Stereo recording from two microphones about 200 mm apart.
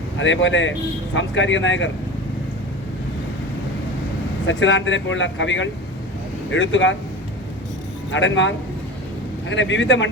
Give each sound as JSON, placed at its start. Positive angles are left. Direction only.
{"t": 0.2, "sound": "speech", "side_deg": 70}
{"t": 4.4, "sound": "speech", "side_deg": 70}
{"t": 8.1, "sound": "speech", "side_deg": 65}